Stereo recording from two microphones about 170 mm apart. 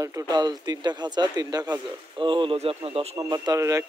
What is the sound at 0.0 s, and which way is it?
Speech, 20° right (ahead or behind).